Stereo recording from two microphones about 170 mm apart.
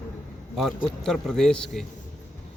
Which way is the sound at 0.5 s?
Centre (ahead or behind).